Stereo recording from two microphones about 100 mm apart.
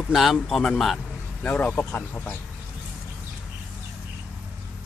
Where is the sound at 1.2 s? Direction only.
20° left (ahead or behind).